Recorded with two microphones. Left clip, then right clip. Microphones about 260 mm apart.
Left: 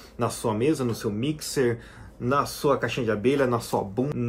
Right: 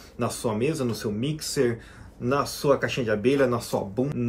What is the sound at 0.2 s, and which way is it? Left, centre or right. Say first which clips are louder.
Speech: left 1 dB; centre.